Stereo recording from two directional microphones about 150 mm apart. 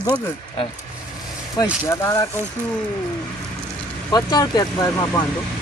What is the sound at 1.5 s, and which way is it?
Speech, 20° left (ahead or behind).